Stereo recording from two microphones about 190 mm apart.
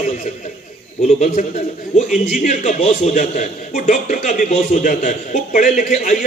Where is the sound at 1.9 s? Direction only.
35° left (ahead or behind).